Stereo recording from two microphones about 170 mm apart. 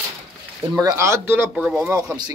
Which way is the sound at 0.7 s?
20° right (ahead or behind).